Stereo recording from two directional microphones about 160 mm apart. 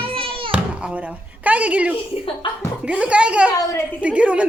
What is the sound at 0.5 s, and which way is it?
A child's voice, 5° right (ahead or behind).